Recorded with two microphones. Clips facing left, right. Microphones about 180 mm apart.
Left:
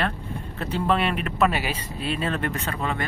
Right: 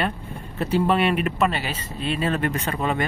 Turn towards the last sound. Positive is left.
turn(degrees=-20)  # may be behind; listen again after turning